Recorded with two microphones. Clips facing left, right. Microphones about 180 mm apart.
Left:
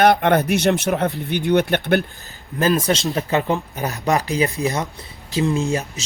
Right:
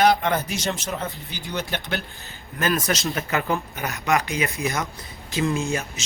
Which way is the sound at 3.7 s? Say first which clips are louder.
Left 3 dB; 35° left (ahead or behind).